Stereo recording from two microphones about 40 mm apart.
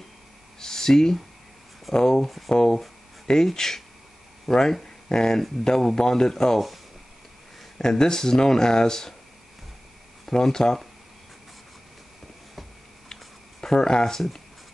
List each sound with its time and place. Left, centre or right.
0.6 s a sound: centre
2.0 s speech: centre
2.2 s speech: centre
2.5 s speech: centre
7.8 s speech: centre
10.2 s speech: centre
13.1 s a sound: centre